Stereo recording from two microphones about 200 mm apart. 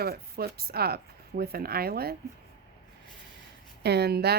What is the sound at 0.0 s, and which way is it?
Speech, 50° right (ahead or behind).